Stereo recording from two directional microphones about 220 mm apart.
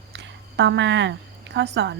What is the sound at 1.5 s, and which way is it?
Speech, 50° right (ahead or behind).